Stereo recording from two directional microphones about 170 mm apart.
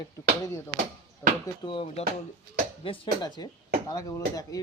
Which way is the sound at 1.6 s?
30° left (ahead or behind).